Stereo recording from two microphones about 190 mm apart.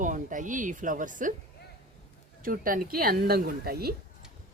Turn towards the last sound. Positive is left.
turn(degrees=-55)  # may be behind; listen again after turning